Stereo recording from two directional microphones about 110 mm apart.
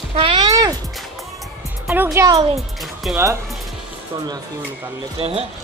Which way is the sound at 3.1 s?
25° right (ahead or behind).